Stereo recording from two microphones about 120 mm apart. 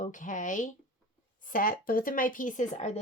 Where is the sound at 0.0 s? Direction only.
90° left.